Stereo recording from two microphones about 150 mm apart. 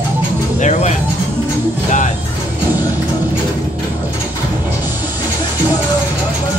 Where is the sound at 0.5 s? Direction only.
50° left (ahead or behind).